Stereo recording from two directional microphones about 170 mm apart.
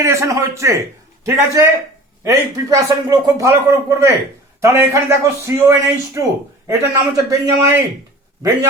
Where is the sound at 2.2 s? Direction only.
20° right (ahead or behind).